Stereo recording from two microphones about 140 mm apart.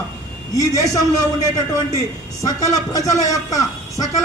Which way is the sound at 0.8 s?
25° left (ahead or behind).